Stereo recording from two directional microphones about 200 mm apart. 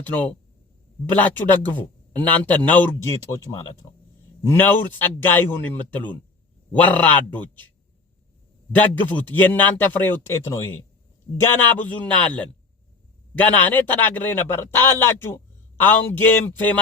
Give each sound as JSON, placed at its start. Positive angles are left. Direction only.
{"t": 0.0, "sound": "a man's voice", "side_deg": 10}
{"t": 8.7, "sound": "a man's voice", "side_deg": 10}